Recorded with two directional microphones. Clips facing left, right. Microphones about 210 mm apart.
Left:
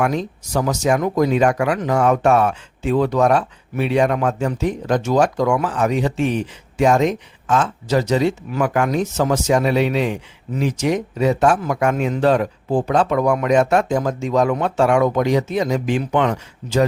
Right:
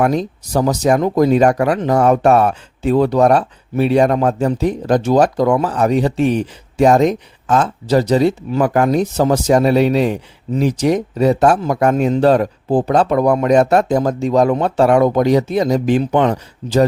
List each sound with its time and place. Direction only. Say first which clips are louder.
0.0 s speech: right 4 dB; 35° right (ahead or behind)